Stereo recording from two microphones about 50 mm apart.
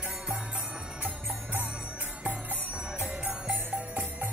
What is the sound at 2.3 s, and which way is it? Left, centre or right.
Music, right.